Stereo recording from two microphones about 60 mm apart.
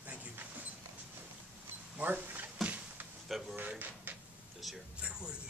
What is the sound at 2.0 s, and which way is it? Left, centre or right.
Speech, right.